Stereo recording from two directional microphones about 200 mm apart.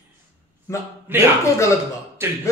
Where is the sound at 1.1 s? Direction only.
10° right (ahead or behind).